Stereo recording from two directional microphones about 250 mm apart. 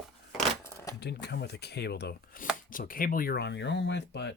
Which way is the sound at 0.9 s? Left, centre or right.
Left.